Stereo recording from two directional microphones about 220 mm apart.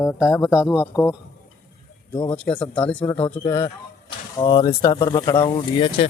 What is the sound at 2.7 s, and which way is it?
Speech, 5° left (ahead or behind).